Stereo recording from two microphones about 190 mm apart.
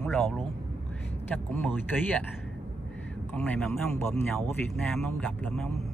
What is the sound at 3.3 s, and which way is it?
Speech, 5° left (ahead or behind).